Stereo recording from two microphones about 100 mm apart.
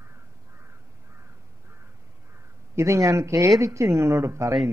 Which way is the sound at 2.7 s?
30° right (ahead or behind).